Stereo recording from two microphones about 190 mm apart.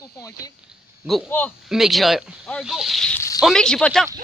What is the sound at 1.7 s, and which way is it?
Speech, centre (ahead or behind).